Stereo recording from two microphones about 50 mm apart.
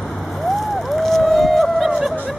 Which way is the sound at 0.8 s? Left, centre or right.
Centre.